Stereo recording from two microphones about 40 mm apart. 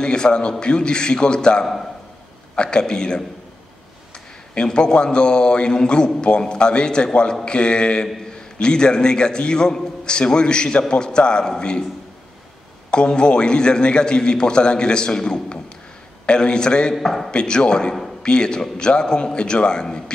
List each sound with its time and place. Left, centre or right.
0.0 s a man's voice: left
4.6 s a man's voice: left
12.9 s a man's voice: left
16.9 s a man's voice: centre
17.3 s a man's voice: left